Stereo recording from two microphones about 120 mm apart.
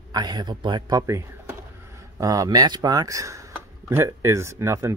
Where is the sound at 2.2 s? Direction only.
30° right (ahead or behind).